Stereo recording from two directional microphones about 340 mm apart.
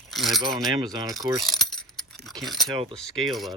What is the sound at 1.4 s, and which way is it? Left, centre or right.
Keys jangling, centre.